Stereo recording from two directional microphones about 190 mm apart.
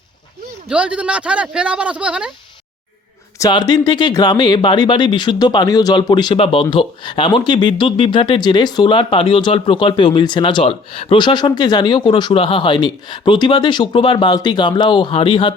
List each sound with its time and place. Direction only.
0.7 s speech: 5° right (ahead or behind)
3.3 s speech: 20° left (ahead or behind)